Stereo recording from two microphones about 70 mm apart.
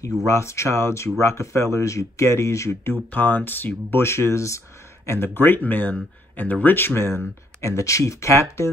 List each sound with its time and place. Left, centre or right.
0.3 s speech: left
3.1 s speech: left